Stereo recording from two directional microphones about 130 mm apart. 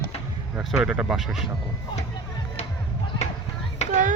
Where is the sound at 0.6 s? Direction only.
5° right (ahead or behind).